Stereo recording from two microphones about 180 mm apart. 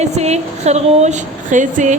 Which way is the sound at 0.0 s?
35° right (ahead or behind).